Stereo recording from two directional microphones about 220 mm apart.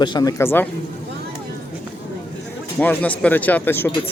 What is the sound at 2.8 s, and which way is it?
Speech, 5° left (ahead or behind).